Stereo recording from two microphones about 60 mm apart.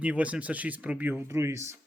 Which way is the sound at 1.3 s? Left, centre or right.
Right.